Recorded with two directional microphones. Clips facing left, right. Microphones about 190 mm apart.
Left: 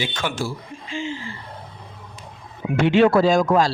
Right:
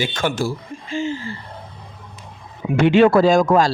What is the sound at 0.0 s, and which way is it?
A man's voice, 45° right (ahead or behind).